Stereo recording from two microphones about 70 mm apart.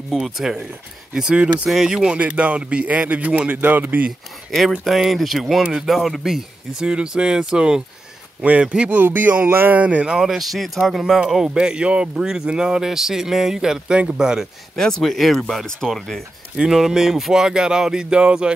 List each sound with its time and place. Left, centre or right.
0.1 s speech: centre; by 4.1 s right
4.5 s speech: centre
14.8 s speech: centre
16.5 s speech: centre